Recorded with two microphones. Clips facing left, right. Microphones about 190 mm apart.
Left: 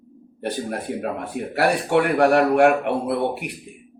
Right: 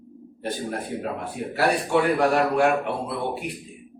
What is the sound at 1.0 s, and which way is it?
A man's voice, 65° left (ahead or behind).